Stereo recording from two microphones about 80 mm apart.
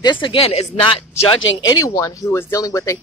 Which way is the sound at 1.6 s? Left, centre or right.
Left.